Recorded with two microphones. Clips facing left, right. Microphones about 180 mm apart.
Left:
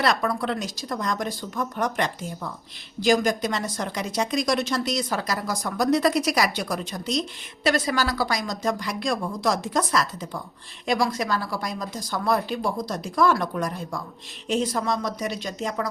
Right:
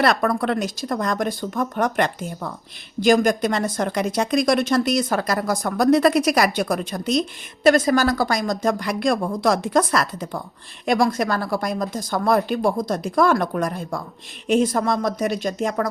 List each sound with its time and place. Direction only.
0.0 s speech: 55° right (ahead or behind)